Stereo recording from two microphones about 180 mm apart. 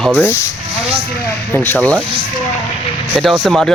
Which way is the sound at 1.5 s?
10° left (ahead or behind).